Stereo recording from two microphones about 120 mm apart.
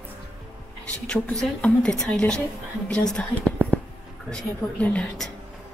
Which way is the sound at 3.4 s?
20° right (ahead or behind).